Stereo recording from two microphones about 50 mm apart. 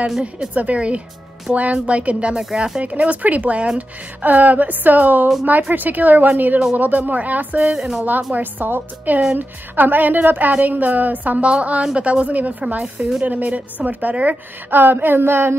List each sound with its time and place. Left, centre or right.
0.6 s a woman's voice: right
2.3 s speech: centre
2.8 s a woman's voice: right
7.7 s speech: centre
8.0 s a woman's voice: right